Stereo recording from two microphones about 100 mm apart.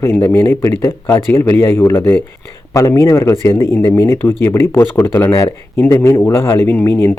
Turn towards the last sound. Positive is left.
turn(degrees=25)  # may be behind; listen again after turning